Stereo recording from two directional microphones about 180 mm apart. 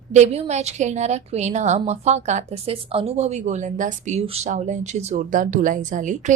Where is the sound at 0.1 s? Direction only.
40° right (ahead or behind).